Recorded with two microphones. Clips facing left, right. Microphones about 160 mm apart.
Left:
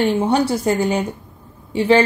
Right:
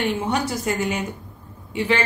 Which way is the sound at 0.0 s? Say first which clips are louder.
Left 6 dB; 30° left (ahead or behind).